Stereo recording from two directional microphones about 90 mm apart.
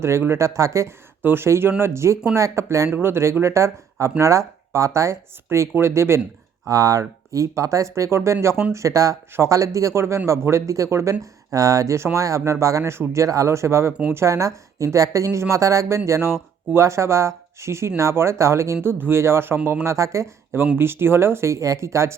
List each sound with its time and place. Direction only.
0.0 s a woman's voice: 30° right (ahead or behind)